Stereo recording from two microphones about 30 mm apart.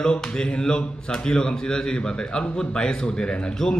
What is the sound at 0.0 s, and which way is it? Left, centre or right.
A man's voice, left.